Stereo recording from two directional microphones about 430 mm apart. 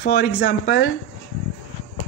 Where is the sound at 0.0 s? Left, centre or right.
Left.